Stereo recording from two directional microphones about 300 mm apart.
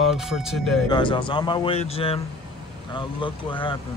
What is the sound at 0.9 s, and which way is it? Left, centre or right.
Speech, centre.